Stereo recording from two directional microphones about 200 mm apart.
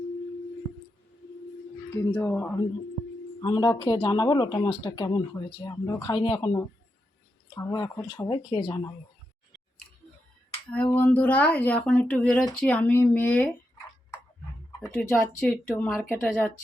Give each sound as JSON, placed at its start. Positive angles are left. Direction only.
{"t": 1.9, "sound": "speech", "side_deg": 5}
{"t": 3.4, "sound": "speech", "side_deg": 20}
{"t": 10.9, "sound": "speech", "side_deg": 10}
{"t": 14.8, "sound": "speech", "side_deg": 5}